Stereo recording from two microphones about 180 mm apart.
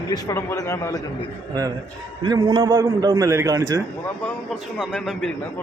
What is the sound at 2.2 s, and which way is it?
A man's voice, 25° right (ahead or behind).